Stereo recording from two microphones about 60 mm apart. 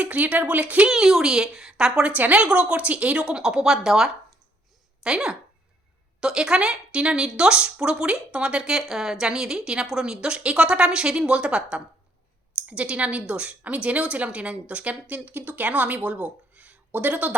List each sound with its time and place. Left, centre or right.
0.0 s a woman's voice: right
0.9 s a woman's voice: centre
2.1 s a woman's voice: right